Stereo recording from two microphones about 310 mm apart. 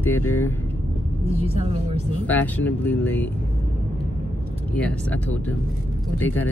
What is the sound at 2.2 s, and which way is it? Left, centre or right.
Speech, centre.